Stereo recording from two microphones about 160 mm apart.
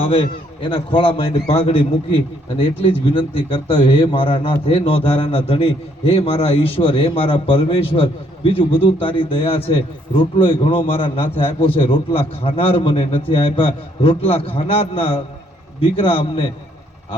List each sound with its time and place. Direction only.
0.0 s a man's voice: 35° left (ahead or behind)